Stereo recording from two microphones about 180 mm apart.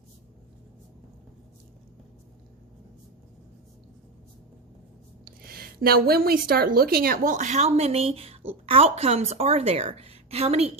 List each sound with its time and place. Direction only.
5.2 s a woman's voice: 55° right (ahead or behind); by 10.7 s 35° right (ahead or behind)